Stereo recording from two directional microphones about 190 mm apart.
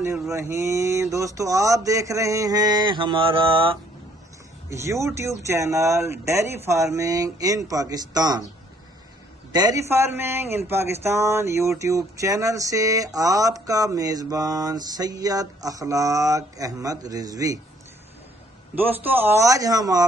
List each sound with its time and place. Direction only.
0.3 s a man's voice: 15° right (ahead or behind)
4.6 s a man's voice: 15° right (ahead or behind)
9.5 s a man's voice: 20° right (ahead or behind)
18.8 s a man's voice: 10° right (ahead or behind)